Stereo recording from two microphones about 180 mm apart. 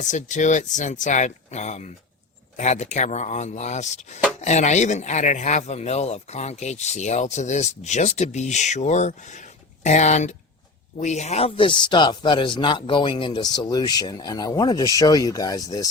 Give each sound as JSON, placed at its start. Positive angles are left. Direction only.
{"t": 0.0, "sound": "speech", "side_deg": 40}